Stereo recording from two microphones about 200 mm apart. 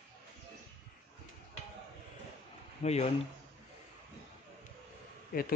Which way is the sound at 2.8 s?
30° left (ahead or behind).